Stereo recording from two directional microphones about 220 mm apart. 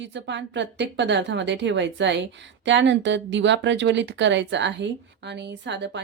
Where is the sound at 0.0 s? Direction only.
55° right (ahead or behind).